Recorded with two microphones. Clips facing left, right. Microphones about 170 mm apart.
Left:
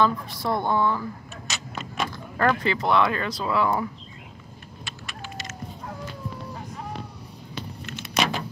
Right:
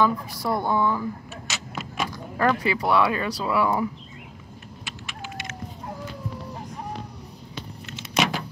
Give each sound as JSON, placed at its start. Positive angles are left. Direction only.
{"t": 0.0, "sound": "speech", "side_deg": -10}